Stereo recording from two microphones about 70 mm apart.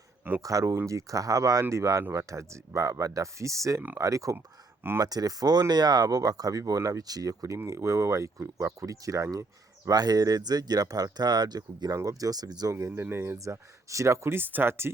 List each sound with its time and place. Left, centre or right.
0.4 s speech: right
4.9 s speech: right
7.7 s speech: right
9.9 s speech: right
11.9 s speech: right
12.9 s speech: right
14.3 s speech: right